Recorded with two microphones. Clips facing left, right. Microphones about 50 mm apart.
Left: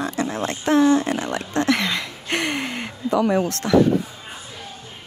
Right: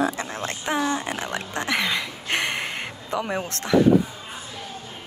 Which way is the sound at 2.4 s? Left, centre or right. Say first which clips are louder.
Left 3 dB; right.